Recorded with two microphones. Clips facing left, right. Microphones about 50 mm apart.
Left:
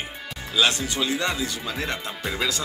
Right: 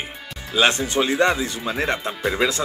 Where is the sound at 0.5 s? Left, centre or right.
Right.